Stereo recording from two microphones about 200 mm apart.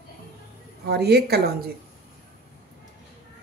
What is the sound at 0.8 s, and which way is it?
Speech, 55° right (ahead or behind).